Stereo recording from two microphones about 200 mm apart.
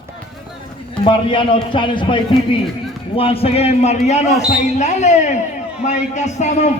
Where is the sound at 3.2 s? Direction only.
30° left (ahead or behind).